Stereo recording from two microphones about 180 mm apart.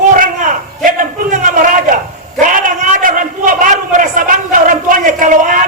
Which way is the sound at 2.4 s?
50° right (ahead or behind).